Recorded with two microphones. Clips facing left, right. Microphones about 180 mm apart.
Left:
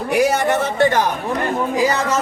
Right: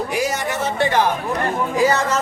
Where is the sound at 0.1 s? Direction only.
60° left (ahead or behind).